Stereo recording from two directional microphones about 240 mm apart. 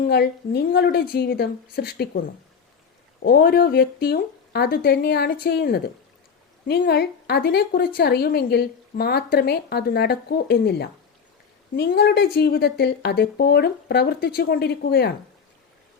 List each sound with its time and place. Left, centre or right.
0.0 s a woman's voice: left